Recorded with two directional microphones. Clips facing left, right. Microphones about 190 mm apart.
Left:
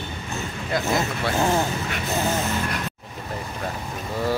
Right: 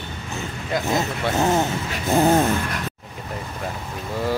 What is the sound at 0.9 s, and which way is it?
Speech, 20° right (ahead or behind).